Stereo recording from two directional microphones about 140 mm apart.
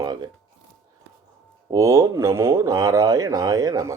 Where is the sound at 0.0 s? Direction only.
30° right (ahead or behind).